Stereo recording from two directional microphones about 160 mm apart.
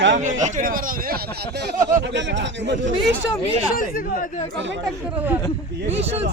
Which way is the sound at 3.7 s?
60° left (ahead or behind).